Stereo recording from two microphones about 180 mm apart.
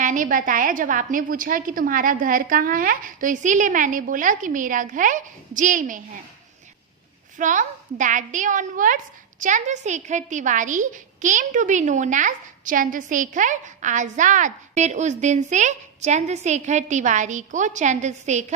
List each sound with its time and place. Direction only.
0.0 s a woman's voice: 45° right (ahead or behind)
7.3 s a woman's voice: 45° right (ahead or behind)